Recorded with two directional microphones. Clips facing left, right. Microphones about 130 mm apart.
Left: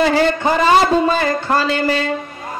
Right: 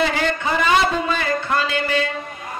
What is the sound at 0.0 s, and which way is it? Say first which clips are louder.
A man's voice: left 6 dB; 35° left (ahead or behind).